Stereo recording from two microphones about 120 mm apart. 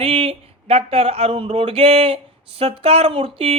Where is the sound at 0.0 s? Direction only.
55° right (ahead or behind).